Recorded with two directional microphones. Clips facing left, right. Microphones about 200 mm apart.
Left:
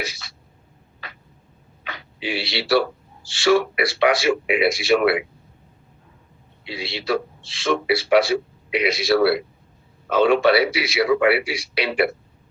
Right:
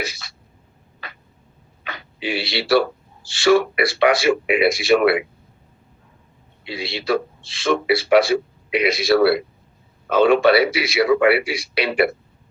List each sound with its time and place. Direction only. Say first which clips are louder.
0.0 s a man's voice: right 2 dB; 50° right (ahead or behind)
1.0 s a sound: right 2 dB; 55° right (ahead or behind)
1.8 s speech: right 2 dB; 50° right (ahead or behind)
6.7 s a man's voice: right 2 dB; 50° right (ahead or behind)